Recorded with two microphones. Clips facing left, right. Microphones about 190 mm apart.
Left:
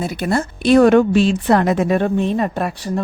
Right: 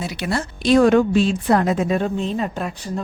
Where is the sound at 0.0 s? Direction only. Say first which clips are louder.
Left 5 dB; 50° left (ahead or behind).